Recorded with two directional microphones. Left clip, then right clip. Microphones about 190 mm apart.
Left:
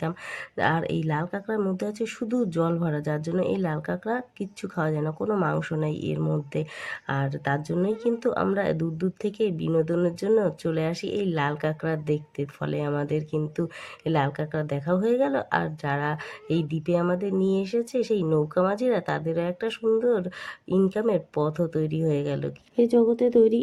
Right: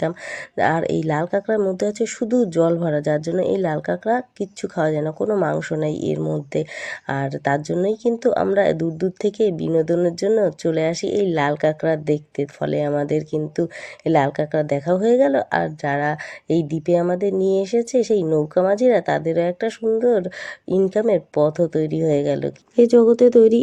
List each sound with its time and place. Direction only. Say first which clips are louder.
0.5 s speech: right 6 dB; 25° right (ahead or behind)
22.7 s speech: right 8 dB; 35° right (ahead or behind)